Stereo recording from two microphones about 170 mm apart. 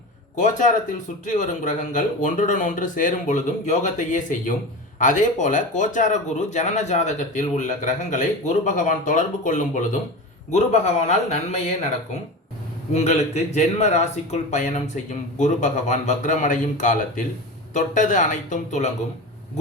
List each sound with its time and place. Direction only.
0.3 s speech: 45° left (ahead or behind)
12.9 s speech: 40° left (ahead or behind)